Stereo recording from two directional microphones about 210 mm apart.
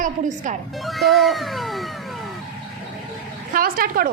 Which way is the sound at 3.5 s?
45° right (ahead or behind).